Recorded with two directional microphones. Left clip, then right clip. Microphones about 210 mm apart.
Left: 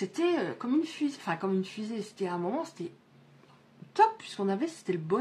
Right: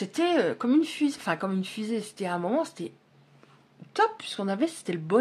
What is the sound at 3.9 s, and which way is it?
Speech, 40° right (ahead or behind).